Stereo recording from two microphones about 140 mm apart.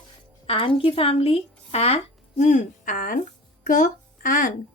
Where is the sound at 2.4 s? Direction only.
60° left (ahead or behind); by 4.5 s 75° left (ahead or behind).